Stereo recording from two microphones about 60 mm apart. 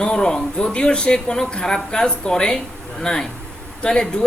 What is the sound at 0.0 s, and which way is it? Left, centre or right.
Speech, centre.